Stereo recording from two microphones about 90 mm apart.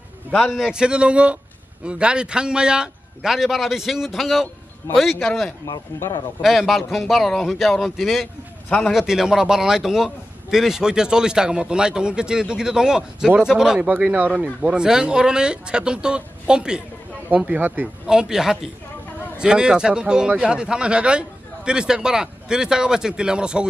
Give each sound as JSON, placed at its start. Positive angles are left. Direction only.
{"t": 0.3, "sound": "a man's voice", "side_deg": 15}
{"t": 0.6, "sound": "a man's voice", "side_deg": -10}
{"t": 8.6, "sound": "a man's voice", "side_deg": 10}
{"t": 8.9, "sound": "a man's voice", "side_deg": -5}
{"t": 13.8, "sound": "a man's voice", "side_deg": -20}
{"t": 18.0, "sound": "a man's voice", "side_deg": -5}